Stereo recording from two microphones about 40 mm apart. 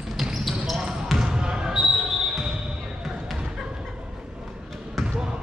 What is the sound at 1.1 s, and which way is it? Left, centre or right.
Basketball bounce, centre.